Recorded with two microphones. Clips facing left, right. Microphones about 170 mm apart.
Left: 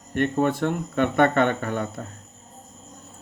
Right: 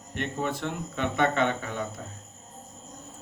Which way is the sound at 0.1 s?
55° left (ahead or behind).